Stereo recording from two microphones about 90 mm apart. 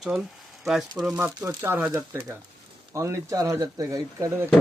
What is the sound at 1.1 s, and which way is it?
Speech, 20° right (ahead or behind).